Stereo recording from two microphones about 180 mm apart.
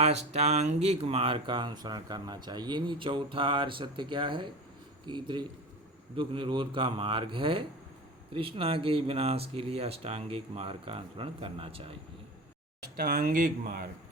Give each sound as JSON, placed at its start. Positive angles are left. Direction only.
{"t": 0.0, "sound": "speech", "side_deg": -35}
{"t": 13.0, "sound": "speech", "side_deg": -60}